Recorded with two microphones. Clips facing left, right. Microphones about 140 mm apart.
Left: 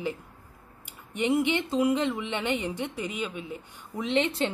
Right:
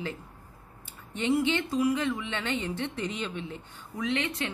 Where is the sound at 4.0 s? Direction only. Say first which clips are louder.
Left 4 dB; 25° left (ahead or behind).